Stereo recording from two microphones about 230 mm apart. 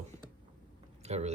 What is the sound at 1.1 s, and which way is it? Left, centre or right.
Speech, right.